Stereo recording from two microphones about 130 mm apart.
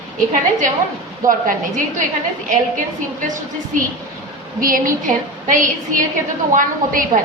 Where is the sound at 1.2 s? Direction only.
90° right.